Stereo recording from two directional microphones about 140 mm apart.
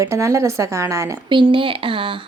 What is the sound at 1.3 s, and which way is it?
Speech, 35° right (ahead or behind).